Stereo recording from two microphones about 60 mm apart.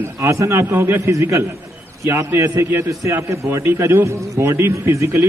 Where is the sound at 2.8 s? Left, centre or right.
Right.